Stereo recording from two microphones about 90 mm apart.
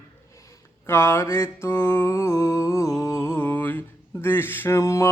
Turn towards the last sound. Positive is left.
turn(degrees=35)  # may be behind; listen again after turning